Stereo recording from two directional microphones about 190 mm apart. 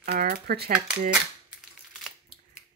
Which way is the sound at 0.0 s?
50° right (ahead or behind).